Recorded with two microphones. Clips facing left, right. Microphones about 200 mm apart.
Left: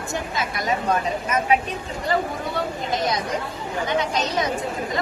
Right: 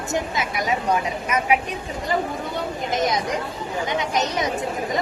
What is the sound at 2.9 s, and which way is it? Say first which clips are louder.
Speech: right 2 dB; 20° right (ahead or behind).